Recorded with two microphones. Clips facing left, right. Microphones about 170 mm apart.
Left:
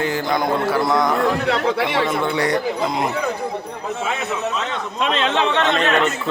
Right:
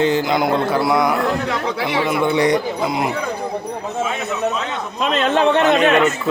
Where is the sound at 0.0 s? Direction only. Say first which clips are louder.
Right 4 dB; 20° right (ahead or behind).